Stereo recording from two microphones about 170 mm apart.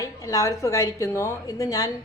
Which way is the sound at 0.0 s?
20° left (ahead or behind).